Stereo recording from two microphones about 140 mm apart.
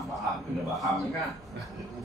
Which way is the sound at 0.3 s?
Centre (ahead or behind).